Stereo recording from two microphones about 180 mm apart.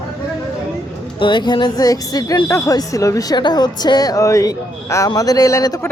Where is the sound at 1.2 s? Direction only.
25° left (ahead or behind).